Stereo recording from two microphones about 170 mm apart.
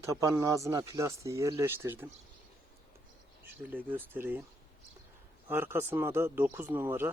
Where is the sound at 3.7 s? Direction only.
10° right (ahead or behind).